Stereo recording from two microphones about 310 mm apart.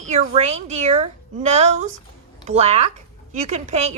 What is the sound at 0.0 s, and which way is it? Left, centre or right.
Speech, right.